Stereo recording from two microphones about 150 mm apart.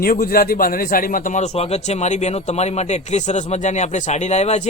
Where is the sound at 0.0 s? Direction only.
75° left (ahead or behind).